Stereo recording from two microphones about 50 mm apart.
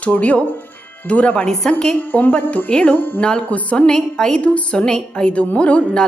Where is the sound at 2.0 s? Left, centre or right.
Left.